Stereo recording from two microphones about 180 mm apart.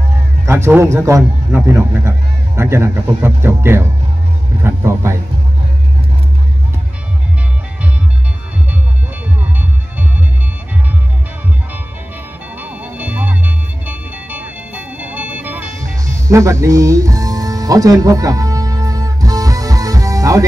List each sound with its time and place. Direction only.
0.5 s a man's voice: 15° right (ahead or behind)
9.4 s music: 10° right (ahead or behind)
12.5 s music: 10° right (ahead or behind)